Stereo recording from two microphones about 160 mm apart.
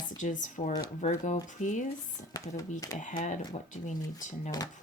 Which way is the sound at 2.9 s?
50° left (ahead or behind).